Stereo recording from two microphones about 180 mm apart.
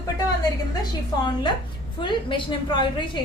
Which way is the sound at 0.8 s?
25° left (ahead or behind).